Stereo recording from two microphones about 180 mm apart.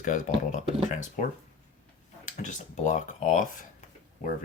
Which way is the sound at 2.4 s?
40° left (ahead or behind).